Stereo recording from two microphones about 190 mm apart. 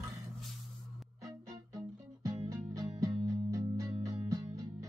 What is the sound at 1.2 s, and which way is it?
Music, 20° right (ahead or behind).